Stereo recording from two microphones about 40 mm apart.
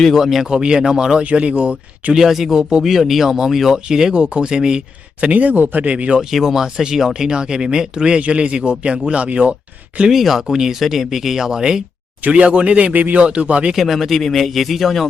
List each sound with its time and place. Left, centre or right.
0.1 s speech: centre
0.4 s speech: right
2.1 s speech: centre
4.1 s speech: right
5.2 s speech: right
5.9 s speech: right
6.3 s speech: centre; by 9.6 s right
10.1 s speech: centre
12.3 s speech: right
13.1 s speech: right
13.7 s speech: centre